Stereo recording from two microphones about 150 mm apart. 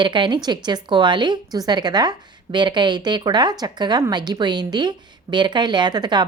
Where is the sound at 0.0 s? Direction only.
30° right (ahead or behind).